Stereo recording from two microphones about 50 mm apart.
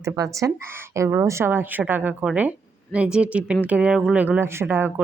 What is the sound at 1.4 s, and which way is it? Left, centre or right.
Speech, right.